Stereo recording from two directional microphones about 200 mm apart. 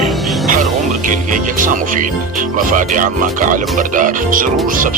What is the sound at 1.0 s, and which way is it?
Speech, 40° right (ahead or behind).